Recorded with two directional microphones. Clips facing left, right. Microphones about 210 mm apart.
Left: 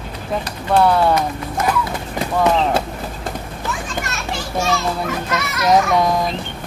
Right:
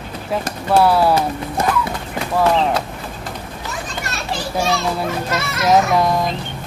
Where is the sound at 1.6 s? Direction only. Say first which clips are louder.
Even; 30° right (ahead or behind).